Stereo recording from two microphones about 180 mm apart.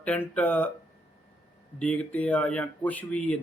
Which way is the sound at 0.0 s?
5° left (ahead or behind).